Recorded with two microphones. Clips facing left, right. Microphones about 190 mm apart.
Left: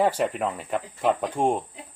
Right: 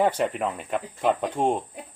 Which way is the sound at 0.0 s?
Centre (ahead or behind).